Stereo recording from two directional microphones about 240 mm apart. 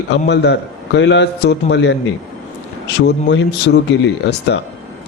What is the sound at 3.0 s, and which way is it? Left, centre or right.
Speech, left.